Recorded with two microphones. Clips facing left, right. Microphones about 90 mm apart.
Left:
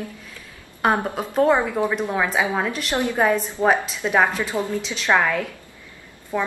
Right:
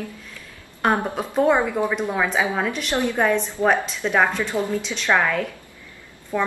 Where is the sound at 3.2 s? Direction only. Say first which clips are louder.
Left 2 dB; 5° left (ahead or behind).